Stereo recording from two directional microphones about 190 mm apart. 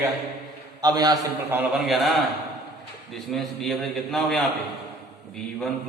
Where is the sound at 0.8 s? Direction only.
20° right (ahead or behind); by 2.1 s centre (ahead or behind).